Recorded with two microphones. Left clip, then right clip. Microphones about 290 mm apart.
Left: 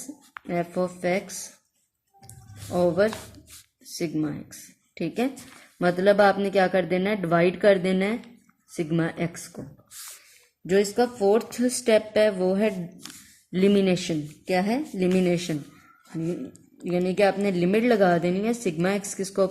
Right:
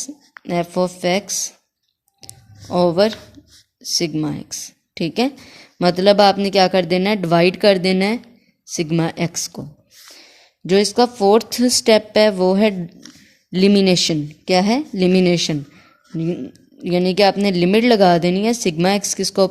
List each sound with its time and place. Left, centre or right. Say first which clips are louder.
0.4 s a woman's voice: right 7 dB; right
2.7 s a woman's voice: right 7 dB; right
10.7 s a woman's voice: right 7 dB; right